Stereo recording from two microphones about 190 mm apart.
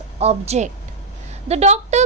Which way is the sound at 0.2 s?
35° right (ahead or behind).